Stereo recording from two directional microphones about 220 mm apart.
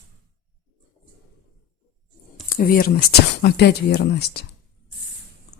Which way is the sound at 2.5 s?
40° left (ahead or behind).